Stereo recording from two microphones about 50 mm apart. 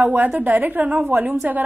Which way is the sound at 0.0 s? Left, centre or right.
Right.